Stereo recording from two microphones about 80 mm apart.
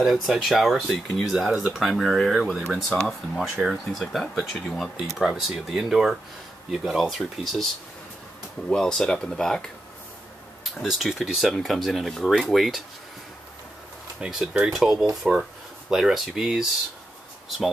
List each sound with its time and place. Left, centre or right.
0.0 s speech: centre
8.6 s speech: centre
14.2 s speech: centre